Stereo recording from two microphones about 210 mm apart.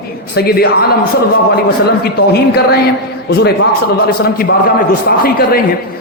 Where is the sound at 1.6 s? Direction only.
50° left (ahead or behind).